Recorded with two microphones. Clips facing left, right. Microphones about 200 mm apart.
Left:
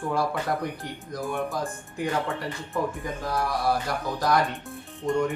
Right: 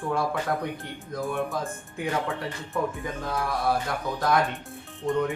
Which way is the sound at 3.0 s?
Centre (ahead or behind).